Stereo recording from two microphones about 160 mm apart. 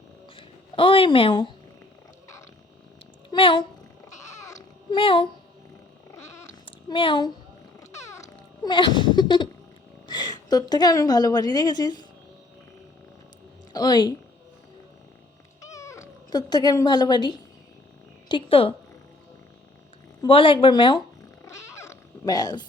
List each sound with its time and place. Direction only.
0.3 s speech: 35° left (ahead or behind)
3.2 s speech: 30° left (ahead or behind)
4.2 s babbling: 20° left (ahead or behind)
4.9 s speech: 30° left (ahead or behind)
6.1 s cat: 15° left (ahead or behind)
6.7 s speech: 30° left (ahead or behind)
7.8 s music: 20° left (ahead or behind)
8.7 s a woman's voice: 30° left (ahead or behind)
13.7 s speech: 25° left (ahead or behind)
15.6 s speech: 20° left (ahead or behind); by 18.7 s 35° left (ahead or behind)
20.2 s speech: 35° left (ahead or behind)
21.4 s cat: 20° left (ahead or behind)